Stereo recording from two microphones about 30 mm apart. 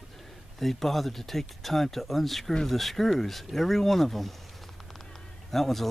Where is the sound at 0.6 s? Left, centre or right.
Centre.